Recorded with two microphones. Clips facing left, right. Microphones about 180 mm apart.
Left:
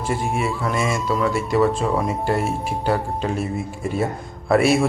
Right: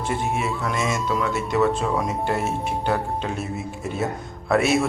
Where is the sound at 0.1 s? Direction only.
Centre (ahead or behind).